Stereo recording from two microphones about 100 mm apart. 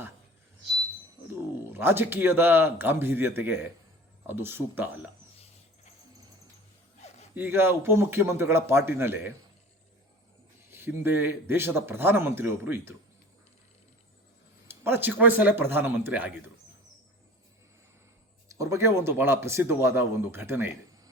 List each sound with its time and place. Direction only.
1.7 s speech: 20° right (ahead or behind)
7.0 s a sound: 90° left
7.3 s speech: 20° right (ahead or behind)
10.7 s speech: 20° right (ahead or behind)
14.7 s speech: 20° right (ahead or behind)
18.4 s speech: 30° right (ahead or behind)